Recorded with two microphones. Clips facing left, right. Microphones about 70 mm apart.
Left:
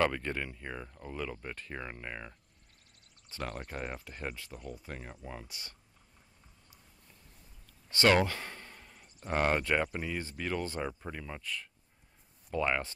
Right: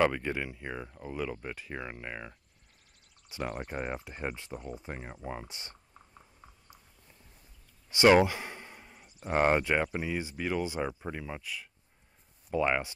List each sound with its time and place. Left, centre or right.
0.0 s speech: centre
7.9 s speech: centre